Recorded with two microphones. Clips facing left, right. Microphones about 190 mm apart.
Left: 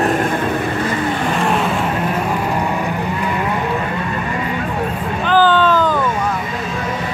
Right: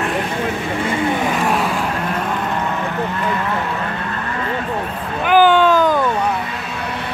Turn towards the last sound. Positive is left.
turn(degrees=-15)  # may be behind; listen again after turning